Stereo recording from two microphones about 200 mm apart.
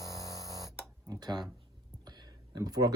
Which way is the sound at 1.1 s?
20° right (ahead or behind).